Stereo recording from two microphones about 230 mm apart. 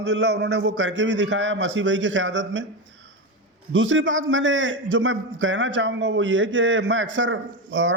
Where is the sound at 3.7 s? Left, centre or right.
Right.